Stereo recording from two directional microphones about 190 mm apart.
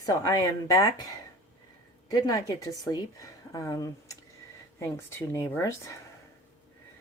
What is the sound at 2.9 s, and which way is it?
Speech, 20° left (ahead or behind).